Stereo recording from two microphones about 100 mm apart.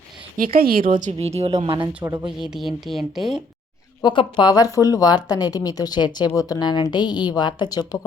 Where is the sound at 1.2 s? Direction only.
90° right.